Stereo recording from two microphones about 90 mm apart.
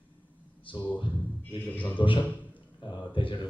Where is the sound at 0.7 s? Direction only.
75° left (ahead or behind).